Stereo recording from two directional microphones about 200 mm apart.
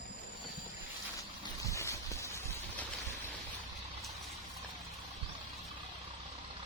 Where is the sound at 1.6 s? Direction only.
15° left (ahead or behind).